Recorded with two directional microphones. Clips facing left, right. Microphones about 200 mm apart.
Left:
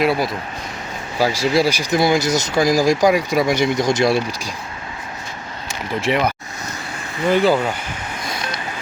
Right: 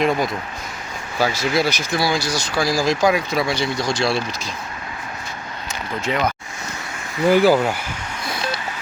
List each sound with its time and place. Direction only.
0.0 s speech: 5° left (ahead or behind)
6.1 s speech: 25° left (ahead or behind)
7.3 s speech: 10° right (ahead or behind)